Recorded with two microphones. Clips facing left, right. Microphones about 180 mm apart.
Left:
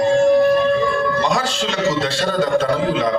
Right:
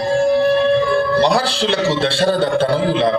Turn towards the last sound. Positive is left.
turn(degrees=-30)  # may be behind; listen again after turning